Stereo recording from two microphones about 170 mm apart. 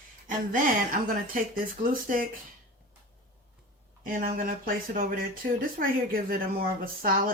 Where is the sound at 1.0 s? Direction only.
55° right (ahead or behind).